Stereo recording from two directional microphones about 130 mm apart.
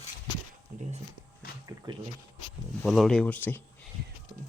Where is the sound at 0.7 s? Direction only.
90° right.